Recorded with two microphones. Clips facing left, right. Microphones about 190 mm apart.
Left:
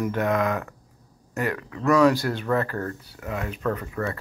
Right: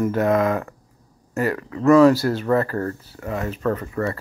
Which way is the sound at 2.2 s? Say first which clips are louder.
Right 5 dB; 40° right (ahead or behind).